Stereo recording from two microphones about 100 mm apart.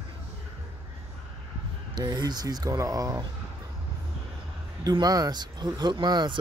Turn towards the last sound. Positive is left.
turn(degrees=-50)  # may be behind; listen again after turning